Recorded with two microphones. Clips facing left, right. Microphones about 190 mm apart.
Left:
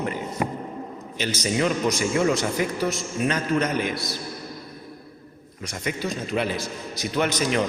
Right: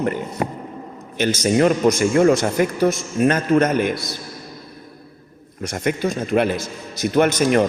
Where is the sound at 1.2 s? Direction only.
50° right (ahead or behind).